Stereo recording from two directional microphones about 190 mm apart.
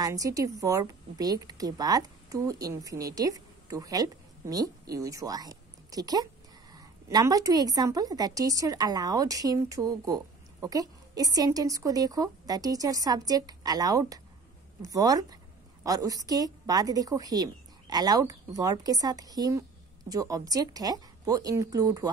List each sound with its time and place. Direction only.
0.0 s a woman's voice: 20° right (ahead or behind)